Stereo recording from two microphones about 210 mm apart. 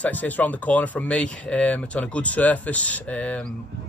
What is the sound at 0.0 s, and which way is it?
Speech, 10° left (ahead or behind).